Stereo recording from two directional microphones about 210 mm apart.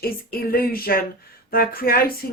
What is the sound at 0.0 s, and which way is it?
Speech, 45° left (ahead or behind).